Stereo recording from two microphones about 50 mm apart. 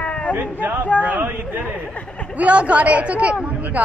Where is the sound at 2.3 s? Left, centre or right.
Right.